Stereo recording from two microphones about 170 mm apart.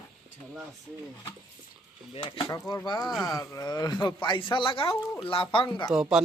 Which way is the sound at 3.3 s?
20° left (ahead or behind).